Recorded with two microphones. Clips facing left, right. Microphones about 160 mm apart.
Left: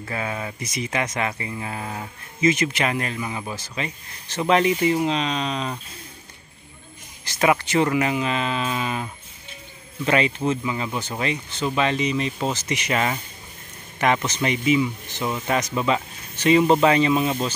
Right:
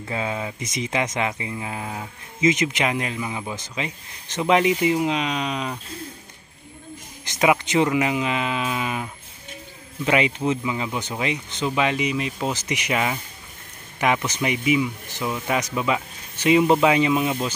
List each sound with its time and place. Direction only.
0.0 s speech: 15° right (ahead or behind)
7.2 s speech: 15° right (ahead or behind)
10.0 s speech: 15° right (ahead or behind)